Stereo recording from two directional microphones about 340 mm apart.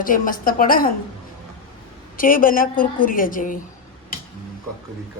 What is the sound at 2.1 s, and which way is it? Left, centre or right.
A woman's voice, left.